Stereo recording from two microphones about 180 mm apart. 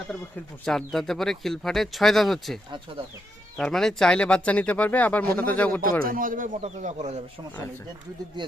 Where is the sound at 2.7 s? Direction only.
30° right (ahead or behind).